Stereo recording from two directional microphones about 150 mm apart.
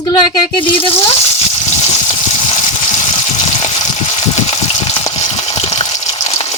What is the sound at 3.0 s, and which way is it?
Water, 50° left (ahead or behind).